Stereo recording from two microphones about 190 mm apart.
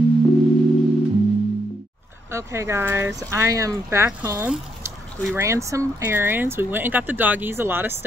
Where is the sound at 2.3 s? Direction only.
15° right (ahead or behind).